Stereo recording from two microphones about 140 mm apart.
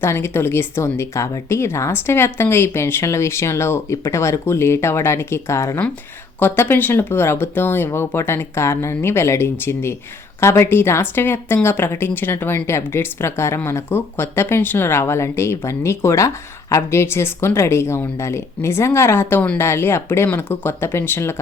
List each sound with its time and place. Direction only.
0.0 s a woman's voice: 15° left (ahead or behind)